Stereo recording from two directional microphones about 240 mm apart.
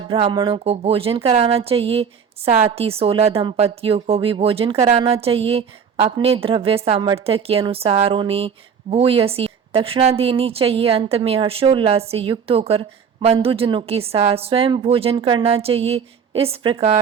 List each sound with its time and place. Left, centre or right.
0.1 s speech: right